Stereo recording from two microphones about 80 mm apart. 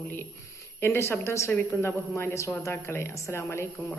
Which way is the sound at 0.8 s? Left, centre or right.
Left.